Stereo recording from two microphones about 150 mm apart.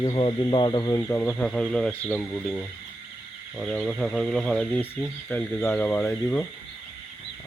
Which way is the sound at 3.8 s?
5° left (ahead or behind).